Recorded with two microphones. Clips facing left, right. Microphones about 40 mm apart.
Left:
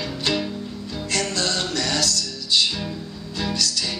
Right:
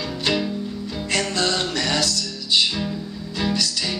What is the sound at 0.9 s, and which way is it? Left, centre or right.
Music, centre.